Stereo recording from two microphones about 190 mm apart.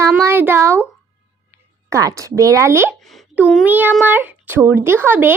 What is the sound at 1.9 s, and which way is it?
A child's voice, 15° right (ahead or behind).